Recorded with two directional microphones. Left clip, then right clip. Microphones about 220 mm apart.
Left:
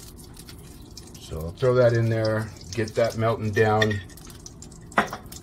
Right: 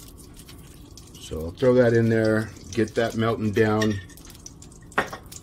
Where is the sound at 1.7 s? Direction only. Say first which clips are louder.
Right 2 dB; 45° right (ahead or behind).